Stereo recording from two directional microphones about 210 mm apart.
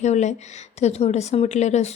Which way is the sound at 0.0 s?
35° left (ahead or behind).